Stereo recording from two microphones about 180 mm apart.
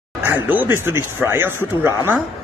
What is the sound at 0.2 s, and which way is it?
Speech, 10° right (ahead or behind).